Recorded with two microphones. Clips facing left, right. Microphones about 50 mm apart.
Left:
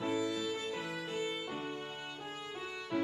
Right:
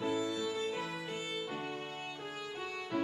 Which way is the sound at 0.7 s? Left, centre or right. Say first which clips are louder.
Even; right.